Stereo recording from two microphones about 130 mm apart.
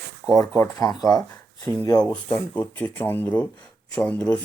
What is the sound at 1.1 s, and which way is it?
Speech, 30° left (ahead or behind).